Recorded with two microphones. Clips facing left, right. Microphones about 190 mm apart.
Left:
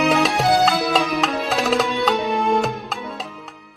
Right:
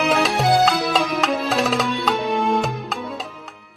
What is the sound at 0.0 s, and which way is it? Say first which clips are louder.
Music: left 1 dB; centre (ahead or behind).